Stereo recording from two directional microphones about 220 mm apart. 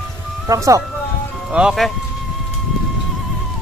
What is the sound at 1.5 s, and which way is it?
Speech, 5° right (ahead or behind).